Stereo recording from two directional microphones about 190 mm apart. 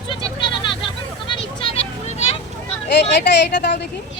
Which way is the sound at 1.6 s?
30° left (ahead or behind).